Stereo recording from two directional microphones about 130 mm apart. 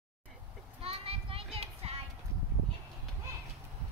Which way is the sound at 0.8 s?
45° right (ahead or behind).